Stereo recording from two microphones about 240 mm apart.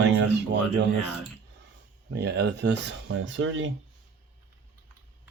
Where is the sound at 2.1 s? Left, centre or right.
Right.